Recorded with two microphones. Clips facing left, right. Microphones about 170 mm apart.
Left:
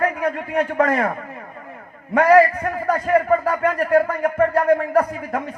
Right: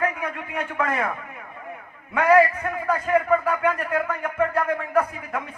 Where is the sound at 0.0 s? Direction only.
40° left (ahead or behind).